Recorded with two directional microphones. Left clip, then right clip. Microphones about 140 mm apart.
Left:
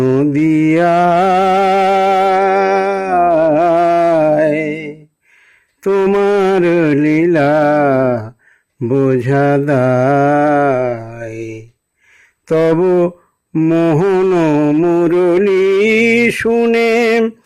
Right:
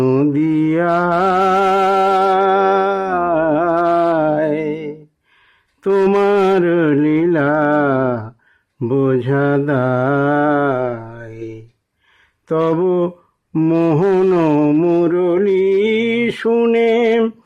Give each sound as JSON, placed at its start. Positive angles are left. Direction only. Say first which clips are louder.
{"t": 0.0, "sound": "mantra", "louder": "left 2 dB", "side_deg": 0}
{"t": 0.3, "sound": "music", "louder": "left 4 dB", "side_deg": 15}
{"t": 5.9, "sound": "mantra", "louder": "left 1 dB", "side_deg": 5}
{"t": 8.8, "sound": "a sound", "louder": "left 3 dB", "side_deg": 5}
{"t": 9.0, "sound": "mantra", "louder": "left 4 dB", "side_deg": 15}
{"t": 12.5, "sound": "mantra", "louder": "left 4 dB", "side_deg": 20}
{"t": 12.8, "sound": "a sound", "louder": "left 4 dB", "side_deg": 15}
{"t": 13.5, "sound": "mantra", "louder": "left 2 dB", "side_deg": 0}
{"t": 15.0, "sound": "music", "louder": "left 3 dB", "side_deg": 20}
{"t": 15.8, "sound": "mantra", "louder": "left 5 dB", "side_deg": -50}
{"t": 16.5, "sound": "mantra", "louder": "right 2 dB", "side_deg": 5}
{"t": 16.7, "sound": "mantra", "louder": "left 2 dB", "side_deg": 20}